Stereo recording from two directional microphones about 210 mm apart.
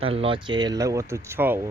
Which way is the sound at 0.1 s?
25° right (ahead or behind).